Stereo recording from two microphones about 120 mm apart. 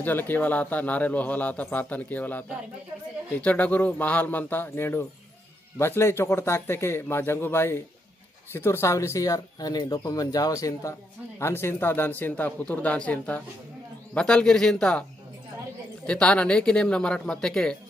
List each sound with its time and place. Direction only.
0.0 s a man's voice: 15° left (ahead or behind)
16.1 s a man's voice: 10° left (ahead or behind)